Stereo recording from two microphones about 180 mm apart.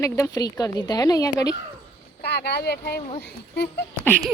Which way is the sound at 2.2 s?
65° left (ahead or behind).